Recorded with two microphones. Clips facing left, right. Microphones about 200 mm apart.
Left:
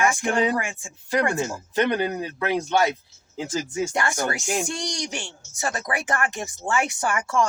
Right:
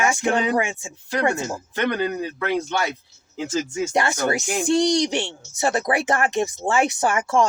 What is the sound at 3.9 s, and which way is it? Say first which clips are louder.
Speech: right 4 dB; 25° right (ahead or behind).